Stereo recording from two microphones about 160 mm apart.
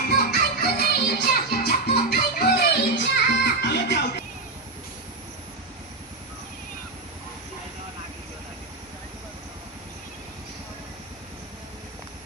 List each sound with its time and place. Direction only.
0.1 s music: 80° left